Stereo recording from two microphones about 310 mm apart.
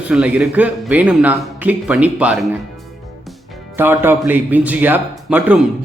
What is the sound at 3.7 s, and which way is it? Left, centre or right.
A man's voice, centre.